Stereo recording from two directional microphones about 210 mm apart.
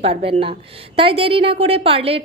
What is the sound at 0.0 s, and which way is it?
A woman's voice, 30° right (ahead or behind).